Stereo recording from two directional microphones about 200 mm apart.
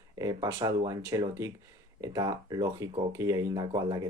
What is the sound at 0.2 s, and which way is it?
Speech, 15° right (ahead or behind).